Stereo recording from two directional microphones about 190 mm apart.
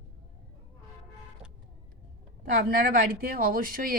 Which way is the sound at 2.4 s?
50° right (ahead or behind).